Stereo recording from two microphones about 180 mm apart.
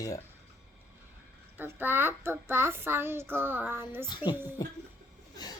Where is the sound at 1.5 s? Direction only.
10° right (ahead or behind).